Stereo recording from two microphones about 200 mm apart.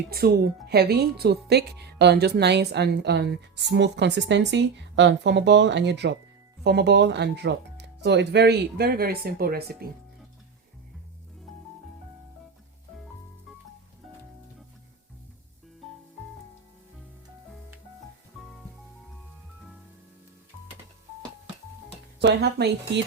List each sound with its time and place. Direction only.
0.1 s speech: 50° right (ahead or behind)
22.2 s speech: 60° right (ahead or behind)